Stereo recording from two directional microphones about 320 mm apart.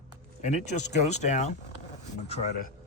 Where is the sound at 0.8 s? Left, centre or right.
Left.